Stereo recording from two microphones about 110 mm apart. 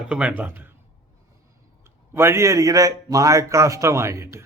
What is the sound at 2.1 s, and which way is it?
A man's voice, 25° right (ahead or behind).